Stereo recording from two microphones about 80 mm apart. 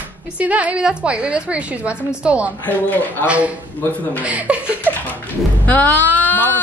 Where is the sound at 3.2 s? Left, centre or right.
Left.